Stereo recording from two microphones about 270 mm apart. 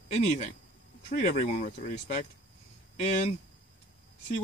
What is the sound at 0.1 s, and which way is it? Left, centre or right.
Speech, left.